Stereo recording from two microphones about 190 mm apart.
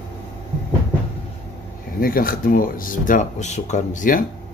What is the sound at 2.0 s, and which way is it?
Speech, 50° left (ahead or behind).